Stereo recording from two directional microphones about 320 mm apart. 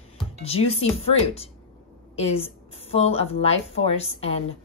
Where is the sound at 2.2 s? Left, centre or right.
Centre.